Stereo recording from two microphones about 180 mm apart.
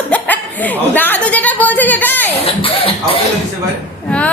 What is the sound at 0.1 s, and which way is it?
A woman's voice, 10° left (ahead or behind).